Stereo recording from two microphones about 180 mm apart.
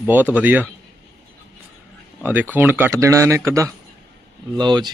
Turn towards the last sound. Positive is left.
turn(degrees=-25)  # may be behind; listen again after turning